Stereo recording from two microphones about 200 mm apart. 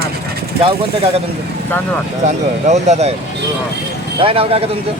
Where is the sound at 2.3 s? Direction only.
35° right (ahead or behind).